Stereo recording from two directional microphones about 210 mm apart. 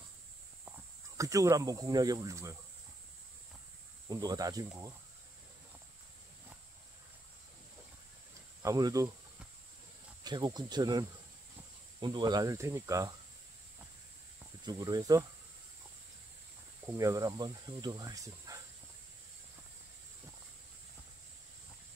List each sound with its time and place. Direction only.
0.7 s speech: 15° right (ahead or behind)
4.1 s speech: 20° right (ahead or behind)
8.6 s speech: 15° right (ahead or behind)
10.2 s speech: 20° right (ahead or behind)
14.6 s speech: 20° right (ahead or behind)
16.8 s speech: 15° right (ahead or behind)